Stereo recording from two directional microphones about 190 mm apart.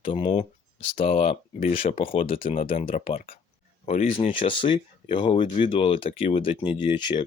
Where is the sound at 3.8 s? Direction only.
45° left (ahead or behind).